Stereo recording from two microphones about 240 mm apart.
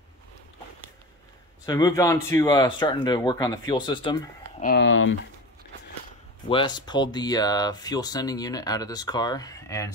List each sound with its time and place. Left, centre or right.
1.7 s speech: centre
4.6 s speech: left
6.5 s speech: centre